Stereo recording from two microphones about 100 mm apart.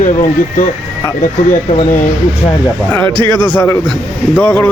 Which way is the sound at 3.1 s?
50° right (ahead or behind).